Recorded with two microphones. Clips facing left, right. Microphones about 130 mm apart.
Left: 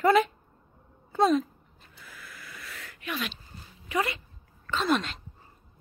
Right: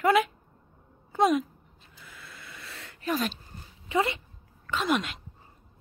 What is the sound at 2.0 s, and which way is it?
Wheeze, 25° right (ahead or behind).